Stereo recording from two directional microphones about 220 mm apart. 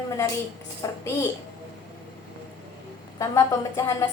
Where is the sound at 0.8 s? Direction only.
15° left (ahead or behind).